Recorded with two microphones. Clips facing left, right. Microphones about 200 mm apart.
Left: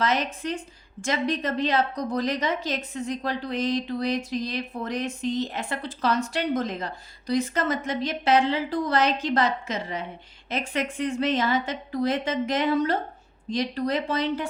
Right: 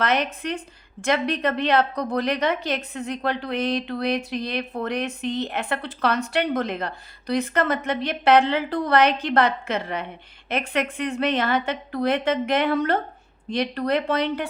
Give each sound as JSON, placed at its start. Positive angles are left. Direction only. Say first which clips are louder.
{"t": 0.0, "sound": "a woman's voice", "louder": "right 2 dB", "side_deg": -60}